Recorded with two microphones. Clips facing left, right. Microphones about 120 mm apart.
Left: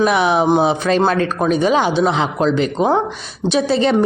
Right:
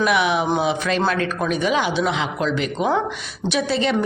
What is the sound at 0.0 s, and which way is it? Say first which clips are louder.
A woman's voice: left 5 dB; 35° left (ahead or behind).